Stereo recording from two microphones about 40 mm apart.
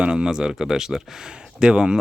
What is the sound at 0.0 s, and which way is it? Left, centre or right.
Speech, right.